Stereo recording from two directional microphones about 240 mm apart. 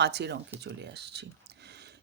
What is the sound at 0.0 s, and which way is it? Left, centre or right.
Speech, right.